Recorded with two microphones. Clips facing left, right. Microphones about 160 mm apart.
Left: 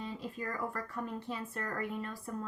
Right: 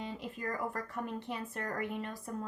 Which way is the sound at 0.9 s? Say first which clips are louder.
Even; 20° right (ahead or behind).